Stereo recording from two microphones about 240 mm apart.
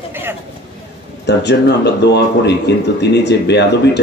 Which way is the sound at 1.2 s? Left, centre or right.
Left.